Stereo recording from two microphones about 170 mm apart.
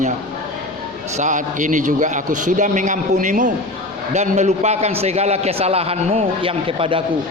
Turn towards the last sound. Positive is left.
turn(degrees=-30)  # may be behind; listen again after turning